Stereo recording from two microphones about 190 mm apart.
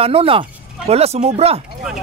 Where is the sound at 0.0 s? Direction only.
30° right (ahead or behind).